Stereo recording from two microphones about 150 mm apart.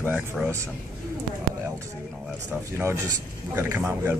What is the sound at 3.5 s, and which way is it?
Speech, 15° right (ahead or behind).